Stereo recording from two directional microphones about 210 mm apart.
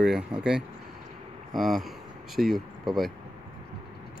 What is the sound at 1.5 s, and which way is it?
Speech, centre (ahead or behind).